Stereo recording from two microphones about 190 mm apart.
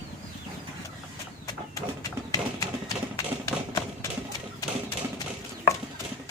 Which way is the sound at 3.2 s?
20° left (ahead or behind).